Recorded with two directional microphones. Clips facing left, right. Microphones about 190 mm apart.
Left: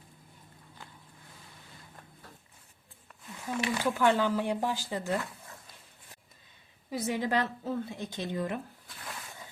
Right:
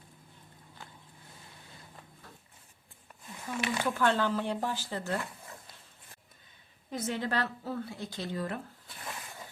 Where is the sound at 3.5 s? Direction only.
15° left (ahead or behind).